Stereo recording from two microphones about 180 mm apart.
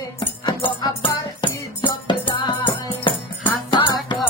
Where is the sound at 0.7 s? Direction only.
25° left (ahead or behind).